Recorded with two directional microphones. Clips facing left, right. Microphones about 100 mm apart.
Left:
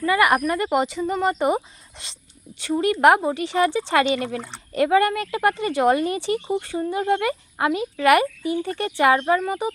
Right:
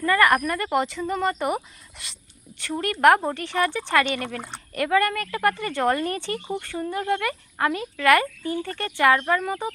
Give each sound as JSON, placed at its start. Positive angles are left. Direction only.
{"t": 0.0, "sound": "speech", "side_deg": 15}